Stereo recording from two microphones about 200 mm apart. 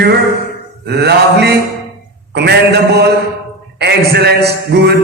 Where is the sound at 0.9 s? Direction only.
55° right (ahead or behind).